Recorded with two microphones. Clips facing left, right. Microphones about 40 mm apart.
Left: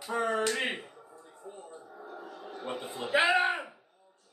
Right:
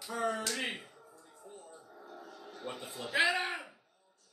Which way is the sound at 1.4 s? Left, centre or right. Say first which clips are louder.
Left 6 dB; left.